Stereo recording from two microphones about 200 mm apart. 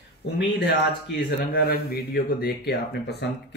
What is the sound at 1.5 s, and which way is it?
Speech, 50° left (ahead or behind).